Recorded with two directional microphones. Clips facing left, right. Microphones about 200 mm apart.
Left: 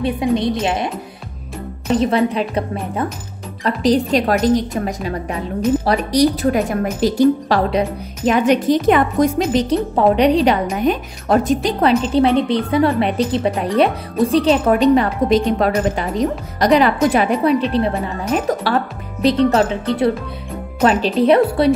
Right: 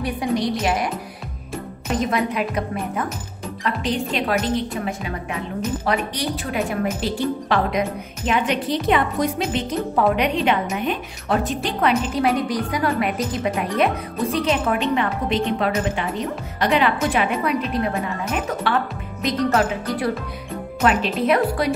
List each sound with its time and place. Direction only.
0.0 s a woman's voice: 25° left (ahead or behind)
2.0 s a woman's voice: 30° left (ahead or behind)